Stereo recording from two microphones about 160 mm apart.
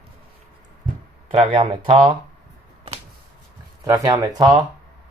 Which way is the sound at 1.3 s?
35° right (ahead or behind).